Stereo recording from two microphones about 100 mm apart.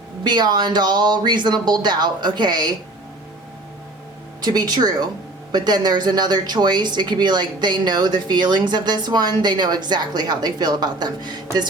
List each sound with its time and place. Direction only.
0.3 s speech: 45° right (ahead or behind)
4.4 s speech: 45° right (ahead or behind)